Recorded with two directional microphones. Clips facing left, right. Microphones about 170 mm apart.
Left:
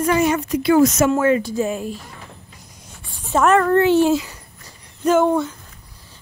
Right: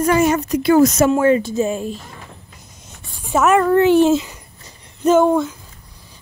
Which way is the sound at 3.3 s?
10° right (ahead or behind).